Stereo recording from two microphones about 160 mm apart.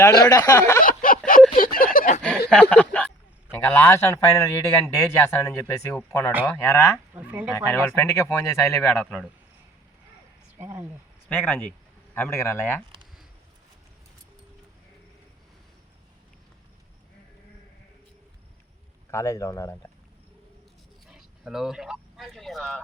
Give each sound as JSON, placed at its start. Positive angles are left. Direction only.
{"t": 0.3, "sound": "a man's voice", "side_deg": 20}
{"t": 0.8, "sound": "a sound", "side_deg": 60}
{"t": 2.5, "sound": "a sound", "side_deg": 5}
{"t": 3.5, "sound": "a man's voice", "side_deg": 20}
{"t": 7.1, "sound": "speech", "side_deg": -10}
{"t": 7.5, "sound": "speech", "side_deg": 15}
{"t": 9.0, "sound": "speech", "side_deg": 5}
{"t": 10.6, "sound": "speech", "side_deg": -15}
{"t": 11.3, "sound": "speech", "side_deg": 10}
{"t": 19.1, "sound": "a man's voice", "side_deg": 20}
{"t": 21.1, "sound": "speech", "side_deg": -5}